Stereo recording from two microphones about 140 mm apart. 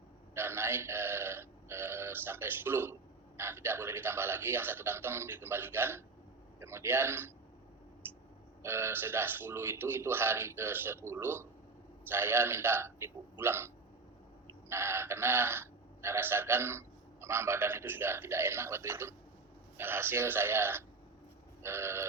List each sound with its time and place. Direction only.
0.3 s a man's voice: 15° right (ahead or behind)
8.6 s a man's voice: 20° right (ahead or behind)
14.7 s a man's voice: 20° right (ahead or behind)